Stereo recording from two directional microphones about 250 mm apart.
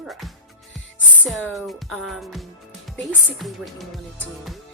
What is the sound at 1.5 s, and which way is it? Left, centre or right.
Speech, centre.